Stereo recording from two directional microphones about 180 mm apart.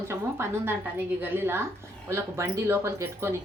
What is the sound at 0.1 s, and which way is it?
A woman's voice, 15° right (ahead or behind).